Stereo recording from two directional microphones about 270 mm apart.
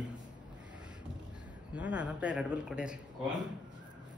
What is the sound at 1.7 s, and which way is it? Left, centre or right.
A man's voice, centre.